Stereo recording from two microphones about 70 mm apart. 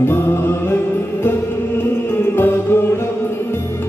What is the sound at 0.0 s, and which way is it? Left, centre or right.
Music, left.